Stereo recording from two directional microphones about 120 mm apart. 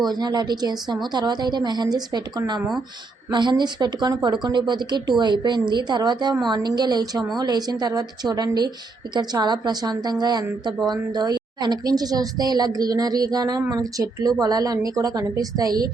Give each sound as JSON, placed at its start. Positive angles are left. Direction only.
{"t": 0.0, "sound": "speech", "side_deg": -35}